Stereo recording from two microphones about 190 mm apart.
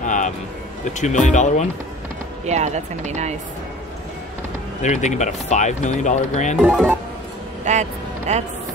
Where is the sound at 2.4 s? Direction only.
35° right (ahead or behind).